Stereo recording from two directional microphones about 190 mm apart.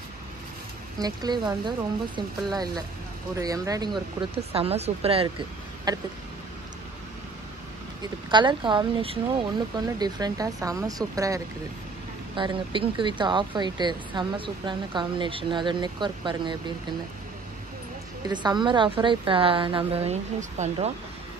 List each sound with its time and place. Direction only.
0.9 s speech: 20° right (ahead or behind)
4.4 s speech: 30° right (ahead or behind)
5.9 s speech: 20° right (ahead or behind)
8.0 s speech: 25° right (ahead or behind)
18.2 s speech: 25° right (ahead or behind)